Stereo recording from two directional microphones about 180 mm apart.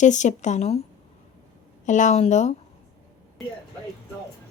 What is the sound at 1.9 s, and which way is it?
Speech, 40° left (ahead or behind).